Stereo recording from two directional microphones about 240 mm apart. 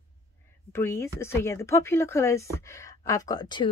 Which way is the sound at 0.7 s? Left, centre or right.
Centre.